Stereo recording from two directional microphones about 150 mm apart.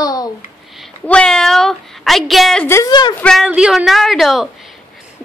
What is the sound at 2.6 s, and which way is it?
Speech, 15° left (ahead or behind).